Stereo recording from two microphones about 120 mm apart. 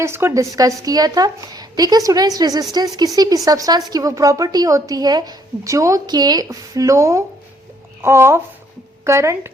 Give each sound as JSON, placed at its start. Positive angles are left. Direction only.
{"t": 0.0, "sound": "a woman's voice", "side_deg": -20}